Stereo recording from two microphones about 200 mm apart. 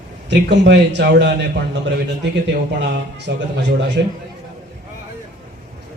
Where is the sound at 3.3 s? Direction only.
60° right (ahead or behind).